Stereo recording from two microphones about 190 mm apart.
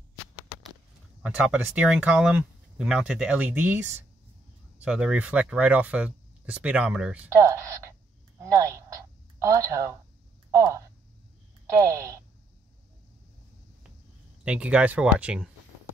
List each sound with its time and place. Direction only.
1.2 s speech: 5° right (ahead or behind)
4.8 s speech: 5° right (ahead or behind)
8.4 s a sound: 15° right (ahead or behind)
10.5 s speech: 15° right (ahead or behind)
14.4 s speech: 5° right (ahead or behind)